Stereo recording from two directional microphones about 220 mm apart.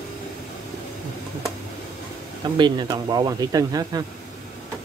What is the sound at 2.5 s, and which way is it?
Speech, 20° right (ahead or behind).